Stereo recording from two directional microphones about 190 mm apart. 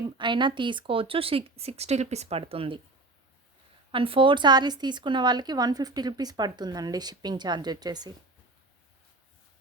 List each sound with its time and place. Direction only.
0.2 s a woman's voice: 25° right (ahead or behind)
3.9 s a woman's voice: 30° right (ahead or behind)